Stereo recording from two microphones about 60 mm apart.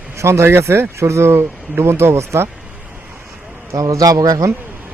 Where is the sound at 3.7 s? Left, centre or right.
Right.